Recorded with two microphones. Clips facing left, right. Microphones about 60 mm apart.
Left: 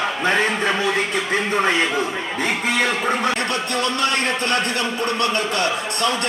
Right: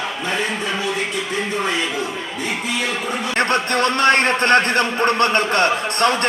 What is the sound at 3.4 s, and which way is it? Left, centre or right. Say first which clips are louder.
Speech: right 5 dB; right.